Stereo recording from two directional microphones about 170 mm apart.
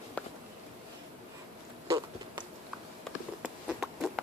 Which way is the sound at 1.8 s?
25° right (ahead or behind).